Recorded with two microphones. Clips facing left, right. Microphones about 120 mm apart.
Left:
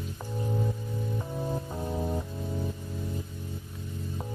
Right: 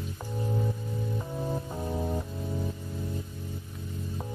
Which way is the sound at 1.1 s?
Centre (ahead or behind).